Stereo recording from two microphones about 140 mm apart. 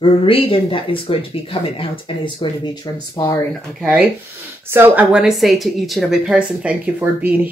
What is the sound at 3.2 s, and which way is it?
Speech, 25° left (ahead or behind).